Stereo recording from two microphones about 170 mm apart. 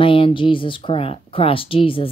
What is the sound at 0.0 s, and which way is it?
Speech, 30° left (ahead or behind).